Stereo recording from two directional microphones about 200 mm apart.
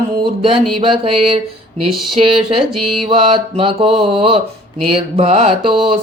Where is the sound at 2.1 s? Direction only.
25° right (ahead or behind).